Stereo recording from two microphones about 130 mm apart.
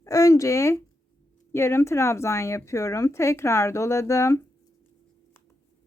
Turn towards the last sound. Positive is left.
turn(degrees=20)  # may be behind; listen again after turning